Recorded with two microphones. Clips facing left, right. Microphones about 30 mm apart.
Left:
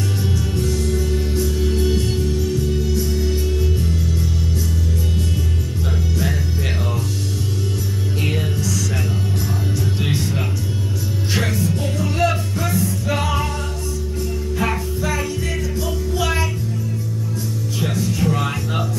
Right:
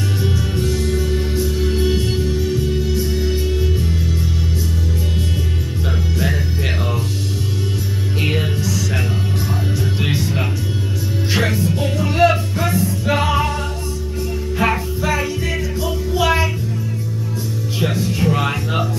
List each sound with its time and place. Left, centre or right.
0.2 s music: centre
8.2 s music: right
9.9 s music: centre
11.3 s music: centre
14.6 s music: centre
17.7 s music: right